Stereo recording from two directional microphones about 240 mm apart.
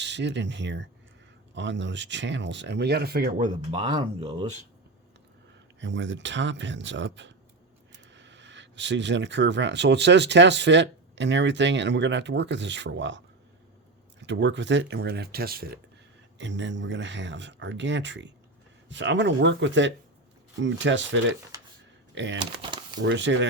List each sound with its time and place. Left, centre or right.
0.0 s speech: right
3.8 s speech: centre
5.8 s speech: right
22.6 s a sound: centre
23.0 s speech: right